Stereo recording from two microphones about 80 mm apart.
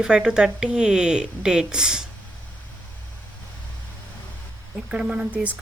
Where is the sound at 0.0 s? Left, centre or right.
Centre.